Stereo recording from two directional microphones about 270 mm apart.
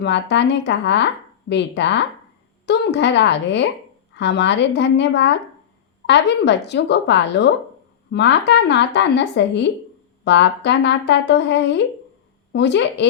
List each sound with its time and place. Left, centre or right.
0.0 s speech: left